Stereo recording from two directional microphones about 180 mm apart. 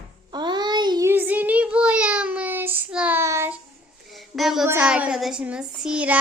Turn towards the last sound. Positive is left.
turn(degrees=-5)  # may be behind; listen again after turning